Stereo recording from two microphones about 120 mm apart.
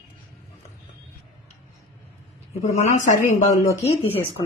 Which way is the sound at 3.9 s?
55° left (ahead or behind).